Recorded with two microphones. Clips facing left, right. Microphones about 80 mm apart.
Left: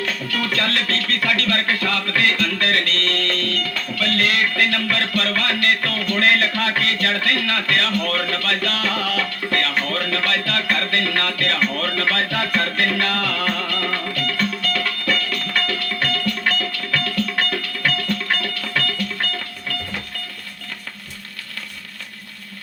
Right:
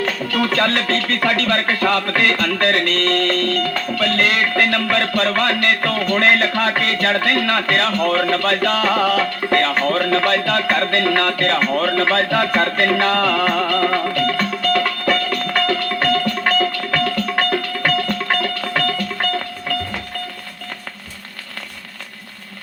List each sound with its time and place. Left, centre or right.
0.0 s music: right